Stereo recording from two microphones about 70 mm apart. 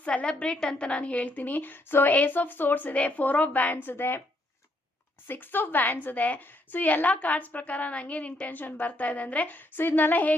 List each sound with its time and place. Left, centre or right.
0.0 s a woman's voice: centre
5.3 s a woman's voice: left